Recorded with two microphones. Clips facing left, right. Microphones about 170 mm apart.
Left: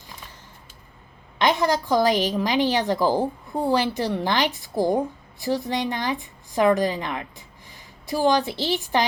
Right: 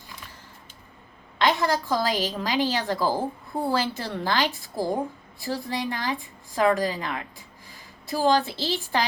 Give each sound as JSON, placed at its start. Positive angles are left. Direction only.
{"t": 1.4, "sound": "a woman's voice", "side_deg": 20}